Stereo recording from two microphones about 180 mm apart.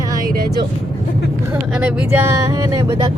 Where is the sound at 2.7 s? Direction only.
20° right (ahead or behind).